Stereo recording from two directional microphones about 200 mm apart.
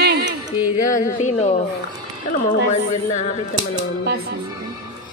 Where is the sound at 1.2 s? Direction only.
35° left (ahead or behind).